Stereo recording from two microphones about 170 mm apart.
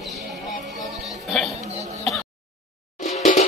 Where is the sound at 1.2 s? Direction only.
Centre (ahead or behind).